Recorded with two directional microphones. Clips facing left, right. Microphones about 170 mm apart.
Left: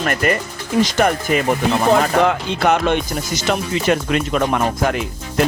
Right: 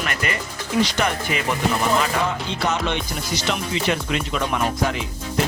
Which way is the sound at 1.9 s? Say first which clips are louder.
Left 7 dB; 65° left (ahead or behind).